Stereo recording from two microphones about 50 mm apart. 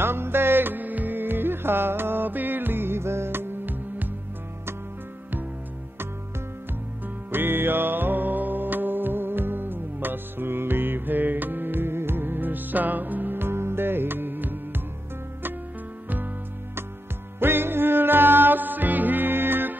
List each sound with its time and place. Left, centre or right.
0.0 s music: right
7.2 s music: right
17.4 s music: right